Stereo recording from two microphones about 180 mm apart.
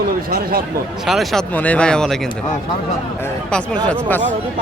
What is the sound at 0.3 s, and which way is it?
Speech, 55° right (ahead or behind).